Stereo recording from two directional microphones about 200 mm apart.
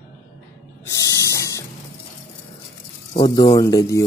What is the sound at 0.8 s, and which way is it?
Spray, 15° left (ahead or behind).